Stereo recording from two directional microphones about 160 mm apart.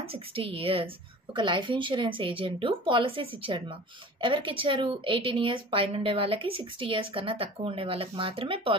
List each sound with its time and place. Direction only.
0.0 s a woman's voice: 35° right (ahead or behind)